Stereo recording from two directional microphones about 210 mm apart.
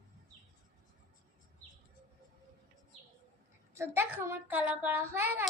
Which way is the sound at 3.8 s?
10° right (ahead or behind).